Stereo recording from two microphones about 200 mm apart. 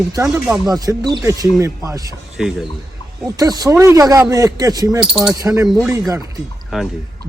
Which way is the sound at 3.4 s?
20° right (ahead or behind).